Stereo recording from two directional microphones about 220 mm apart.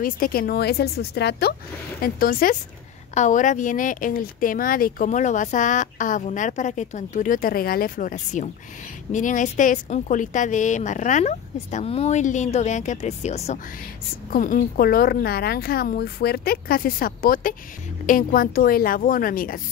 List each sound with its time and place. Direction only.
0.0 s speech: 40° left (ahead or behind)